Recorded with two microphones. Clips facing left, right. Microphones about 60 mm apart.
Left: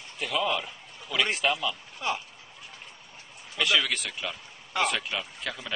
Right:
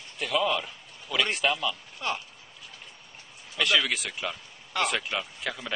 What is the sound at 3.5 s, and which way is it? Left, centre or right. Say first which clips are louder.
Speech: right 1 dB; centre.